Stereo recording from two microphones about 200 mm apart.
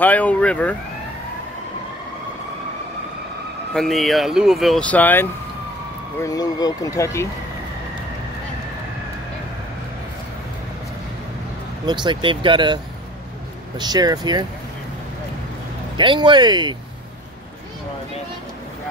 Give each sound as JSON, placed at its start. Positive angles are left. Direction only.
{"t": 0.0, "sound": "speech", "side_deg": 10}
{"t": 3.7, "sound": "speech", "side_deg": 0}
{"t": 11.8, "sound": "speech", "side_deg": -20}
{"t": 16.0, "sound": "speech", "side_deg": -25}